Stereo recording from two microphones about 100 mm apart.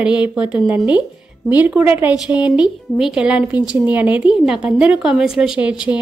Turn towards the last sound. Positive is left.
turn(degrees=-10)  # may be behind; listen again after turning